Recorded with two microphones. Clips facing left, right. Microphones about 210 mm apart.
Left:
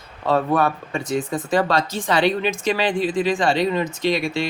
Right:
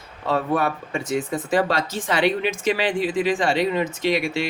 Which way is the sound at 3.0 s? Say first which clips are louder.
Left 1 dB; 10° right (ahead or behind).